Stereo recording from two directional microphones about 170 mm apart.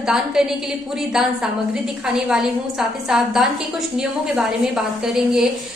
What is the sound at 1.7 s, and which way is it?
A woman's voice, 5° right (ahead or behind).